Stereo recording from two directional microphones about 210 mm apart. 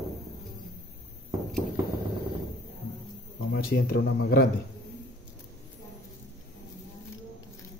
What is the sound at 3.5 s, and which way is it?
Speech, 50° left (ahead or behind).